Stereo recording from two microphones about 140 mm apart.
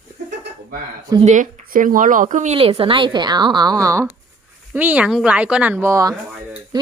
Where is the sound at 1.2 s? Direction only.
65° right (ahead or behind).